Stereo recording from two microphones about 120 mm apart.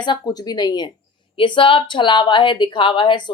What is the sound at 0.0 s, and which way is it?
A woman's voice, 35° left (ahead or behind).